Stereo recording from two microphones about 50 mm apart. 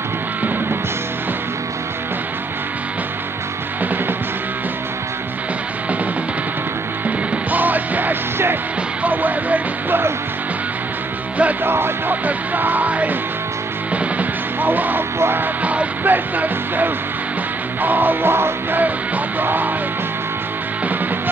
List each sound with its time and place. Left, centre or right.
7.1 s music: right
11.6 s music: right
12.3 s speech: right
13.9 s music: right
15.1 s music: right
15.6 s music: right
16.0 s speech: right
17.8 s music: right
19.4 s speech: right